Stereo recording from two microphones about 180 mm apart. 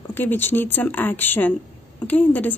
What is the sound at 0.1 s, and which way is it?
A woman's voice, 10° left (ahead or behind).